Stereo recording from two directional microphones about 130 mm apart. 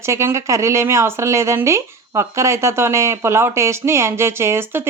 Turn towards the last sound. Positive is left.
turn(degrees=-20)  # may be behind; listen again after turning